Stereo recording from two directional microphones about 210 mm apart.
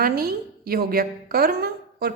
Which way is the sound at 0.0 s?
45° right (ahead or behind).